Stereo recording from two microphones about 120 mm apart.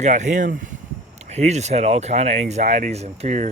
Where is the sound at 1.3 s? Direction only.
65° right (ahead or behind).